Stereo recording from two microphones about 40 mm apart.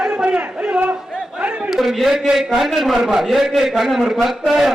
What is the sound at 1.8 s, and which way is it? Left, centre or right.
A man's voice, centre.